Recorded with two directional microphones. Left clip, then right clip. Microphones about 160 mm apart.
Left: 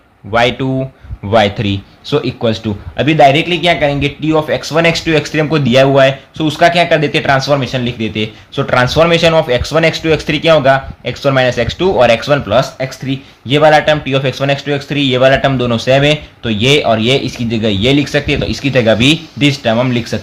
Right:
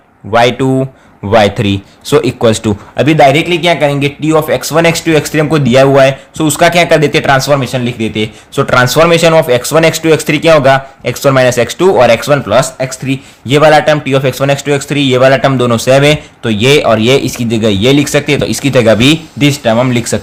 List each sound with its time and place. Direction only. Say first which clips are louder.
0.3 s a man's voice: right 4 dB; 30° right (ahead or behind)